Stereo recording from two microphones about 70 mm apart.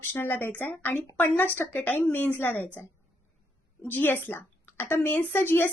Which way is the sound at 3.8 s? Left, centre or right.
Left.